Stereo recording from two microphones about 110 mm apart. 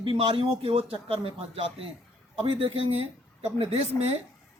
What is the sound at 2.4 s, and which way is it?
Speech, 60° right (ahead or behind).